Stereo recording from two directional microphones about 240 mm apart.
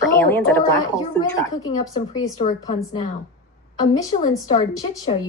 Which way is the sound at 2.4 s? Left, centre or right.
Left.